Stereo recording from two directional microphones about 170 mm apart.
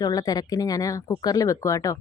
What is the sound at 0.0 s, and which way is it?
A woman's voice, 20° left (ahead or behind).